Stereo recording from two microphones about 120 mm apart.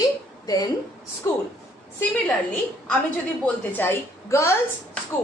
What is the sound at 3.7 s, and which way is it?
Speech, 20° left (ahead or behind).